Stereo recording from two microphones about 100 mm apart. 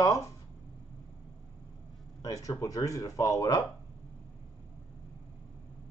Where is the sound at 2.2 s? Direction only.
35° left (ahead or behind).